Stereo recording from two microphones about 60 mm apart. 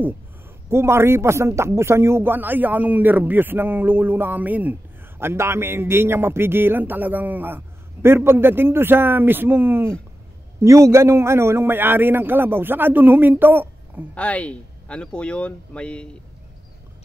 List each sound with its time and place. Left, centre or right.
0.7 s a man's voice: right
5.2 s a man's voice: right
10.6 s a man's voice: right
14.1 s speech: left